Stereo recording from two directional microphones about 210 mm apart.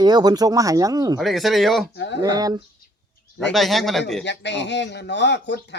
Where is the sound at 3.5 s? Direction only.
Centre (ahead or behind).